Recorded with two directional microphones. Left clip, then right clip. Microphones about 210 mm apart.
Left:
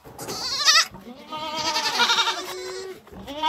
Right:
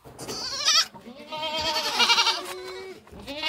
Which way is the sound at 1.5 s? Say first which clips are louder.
Left 2 dB; 35° right (ahead or behind).